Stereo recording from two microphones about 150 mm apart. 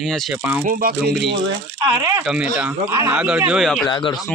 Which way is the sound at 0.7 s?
65° right (ahead or behind).